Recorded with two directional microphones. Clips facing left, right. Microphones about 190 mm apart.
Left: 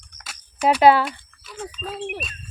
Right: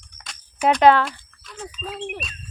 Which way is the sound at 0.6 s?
5° left (ahead or behind).